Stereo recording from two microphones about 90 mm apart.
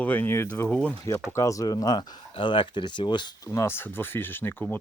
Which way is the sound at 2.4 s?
70° left (ahead or behind).